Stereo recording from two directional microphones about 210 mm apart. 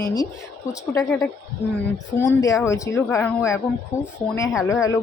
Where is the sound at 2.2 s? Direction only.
15° left (ahead or behind).